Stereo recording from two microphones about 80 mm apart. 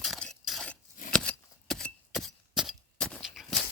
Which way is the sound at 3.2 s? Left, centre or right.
Centre.